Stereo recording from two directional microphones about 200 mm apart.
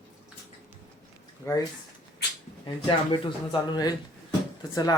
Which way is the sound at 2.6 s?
25° left (ahead or behind).